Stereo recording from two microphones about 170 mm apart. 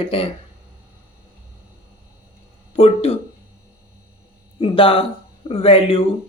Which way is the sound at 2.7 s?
35° left (ahead or behind).